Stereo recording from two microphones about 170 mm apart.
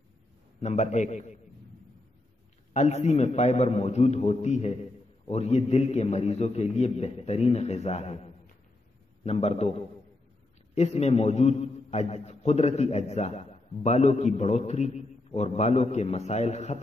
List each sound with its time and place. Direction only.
0.6 s a man's voice: 40° left (ahead or behind)
2.7 s a man's voice: 40° left (ahead or behind)
9.2 s a man's voice: 40° left (ahead or behind)